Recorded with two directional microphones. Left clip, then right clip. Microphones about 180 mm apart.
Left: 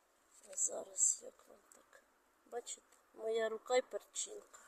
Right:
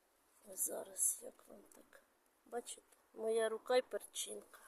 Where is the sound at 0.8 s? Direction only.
Centre (ahead or behind).